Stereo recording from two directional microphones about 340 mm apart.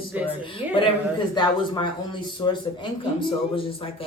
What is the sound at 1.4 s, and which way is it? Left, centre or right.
Speech, centre.